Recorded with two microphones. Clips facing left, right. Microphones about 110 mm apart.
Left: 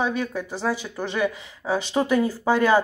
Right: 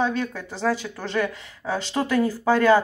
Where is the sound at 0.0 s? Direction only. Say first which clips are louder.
Even; 10° left (ahead or behind).